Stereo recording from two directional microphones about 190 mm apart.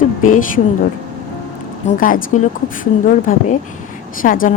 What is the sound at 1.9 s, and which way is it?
A woman's voice, 45° left (ahead or behind).